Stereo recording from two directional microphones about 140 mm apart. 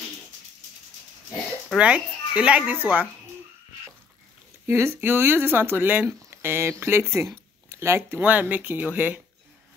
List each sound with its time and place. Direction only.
1.8 s speech: 10° right (ahead or behind)
4.6 s speech: 20° right (ahead or behind)